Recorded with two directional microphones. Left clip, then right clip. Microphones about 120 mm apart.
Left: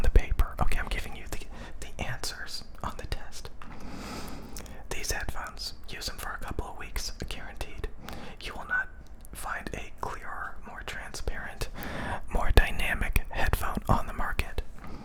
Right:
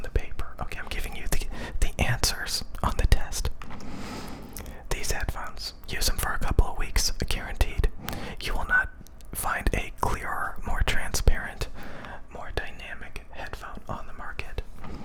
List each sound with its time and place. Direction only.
0.1 s whispering: 20° left (ahead or behind)
1.0 s whispering: 25° right (ahead or behind)
1.6 s whispering: 50° right (ahead or behind)
3.8 s a sound: 15° right (ahead or behind)
4.5 s whispering: 20° right (ahead or behind)
5.9 s whispering: 45° right (ahead or behind)
11.8 s whispering: 25° left (ahead or behind)